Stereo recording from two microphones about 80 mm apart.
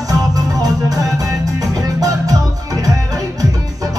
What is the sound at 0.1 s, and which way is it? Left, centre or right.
Music, right.